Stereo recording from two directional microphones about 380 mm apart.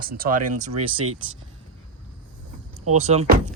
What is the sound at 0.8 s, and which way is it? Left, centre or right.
Speech, right.